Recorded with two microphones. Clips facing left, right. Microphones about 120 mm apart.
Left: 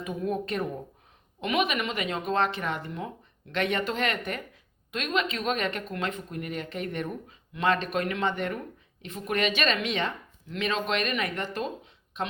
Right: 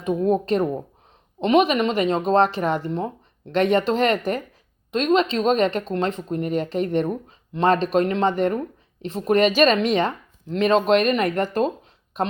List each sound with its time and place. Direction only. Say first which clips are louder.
0.0 s speech: right 10 dB; 30° right (ahead or behind)